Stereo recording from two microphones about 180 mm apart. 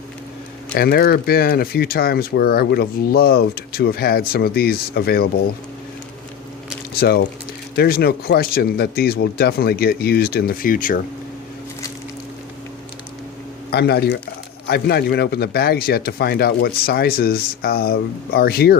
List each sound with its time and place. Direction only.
0.7 s speech: 60° left (ahead or behind)
6.9 s speech: 60° left (ahead or behind)
13.7 s speech: 60° left (ahead or behind)